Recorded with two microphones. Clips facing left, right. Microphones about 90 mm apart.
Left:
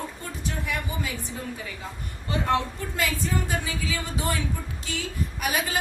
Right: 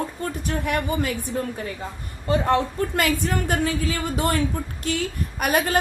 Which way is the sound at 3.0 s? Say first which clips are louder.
Right 3 dB; 70° right (ahead or behind).